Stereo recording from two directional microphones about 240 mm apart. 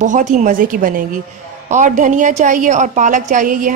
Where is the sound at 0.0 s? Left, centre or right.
Right.